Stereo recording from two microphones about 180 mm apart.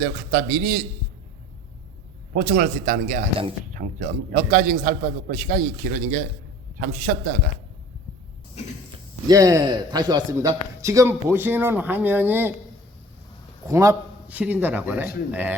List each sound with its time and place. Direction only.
0.0 s a man's voice: 60° right (ahead or behind)
2.3 s a man's voice: 50° right (ahead or behind)
9.2 s a man's voice: 20° right (ahead or behind)
13.7 s a man's voice: 15° right (ahead or behind)